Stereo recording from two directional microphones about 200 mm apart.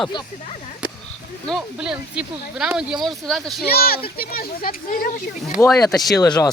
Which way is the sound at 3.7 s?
50° left (ahead or behind).